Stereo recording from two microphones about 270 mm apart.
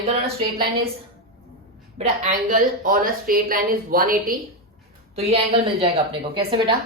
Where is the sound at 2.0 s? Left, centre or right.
Right.